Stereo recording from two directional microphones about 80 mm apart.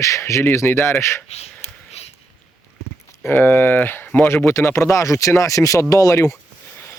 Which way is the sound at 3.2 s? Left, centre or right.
Left.